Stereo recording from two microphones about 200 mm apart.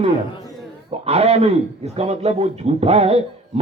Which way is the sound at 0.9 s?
30° right (ahead or behind).